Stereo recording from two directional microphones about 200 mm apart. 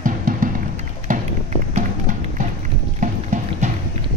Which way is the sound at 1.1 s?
35° right (ahead or behind).